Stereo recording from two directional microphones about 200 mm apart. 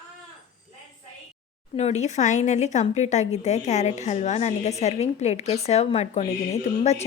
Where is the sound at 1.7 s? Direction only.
35° left (ahead or behind).